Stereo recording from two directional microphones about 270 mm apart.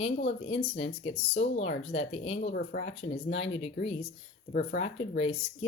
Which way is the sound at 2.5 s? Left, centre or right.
Left.